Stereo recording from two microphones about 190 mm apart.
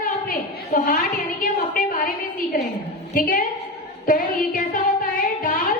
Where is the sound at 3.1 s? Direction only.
45° left (ahead or behind).